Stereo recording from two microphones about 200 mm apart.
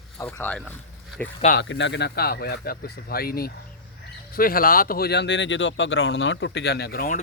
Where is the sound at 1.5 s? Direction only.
65° left (ahead or behind).